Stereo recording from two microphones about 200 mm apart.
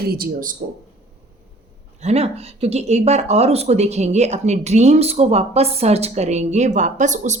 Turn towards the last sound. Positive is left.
turn(degrees=-40)  # may be behind; listen again after turning